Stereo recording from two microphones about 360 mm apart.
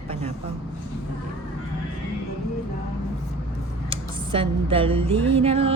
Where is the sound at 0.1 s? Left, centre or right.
Centre.